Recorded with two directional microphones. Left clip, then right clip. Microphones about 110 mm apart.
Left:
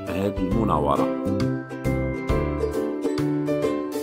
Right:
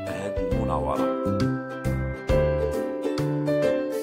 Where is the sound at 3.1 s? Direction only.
Centre (ahead or behind).